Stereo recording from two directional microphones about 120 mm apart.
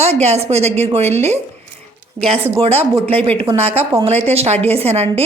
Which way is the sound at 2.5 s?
55° right (ahead or behind).